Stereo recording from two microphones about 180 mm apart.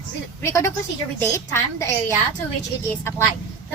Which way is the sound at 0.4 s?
15° left (ahead or behind).